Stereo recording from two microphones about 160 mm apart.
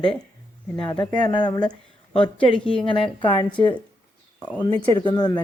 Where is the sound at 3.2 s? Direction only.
30° left (ahead or behind).